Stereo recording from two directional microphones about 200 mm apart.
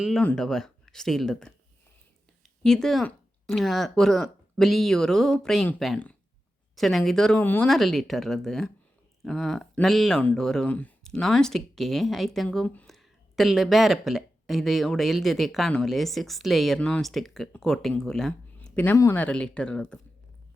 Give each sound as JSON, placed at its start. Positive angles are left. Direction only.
{"t": 0.0, "sound": "speech", "side_deg": 5}
{"t": 2.6, "sound": "speech", "side_deg": 0}